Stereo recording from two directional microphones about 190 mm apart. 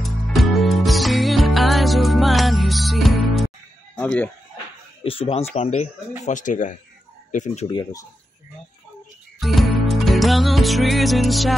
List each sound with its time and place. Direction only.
0.0 s music: centre (ahead or behind)
3.9 s chicken: 5° left (ahead or behind)
5.0 s speech: 30° left (ahead or behind)
7.7 s speech: 15° left (ahead or behind)
9.4 s music: centre (ahead or behind)